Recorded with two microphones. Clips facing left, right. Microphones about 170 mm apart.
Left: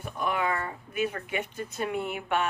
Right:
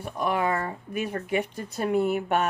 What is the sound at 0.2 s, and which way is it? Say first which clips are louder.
Speech: right 3 dB; 40° right (ahead or behind).